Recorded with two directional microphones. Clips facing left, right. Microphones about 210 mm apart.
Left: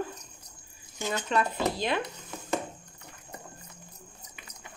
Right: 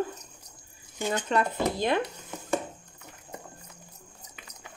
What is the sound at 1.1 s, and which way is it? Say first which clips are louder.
Speech: right 2 dB; 50° right (ahead or behind).